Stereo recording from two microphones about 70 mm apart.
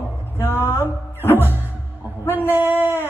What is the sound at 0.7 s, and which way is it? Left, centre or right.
Music, left.